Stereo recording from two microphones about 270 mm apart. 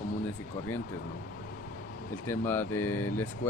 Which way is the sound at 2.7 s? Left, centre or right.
Left.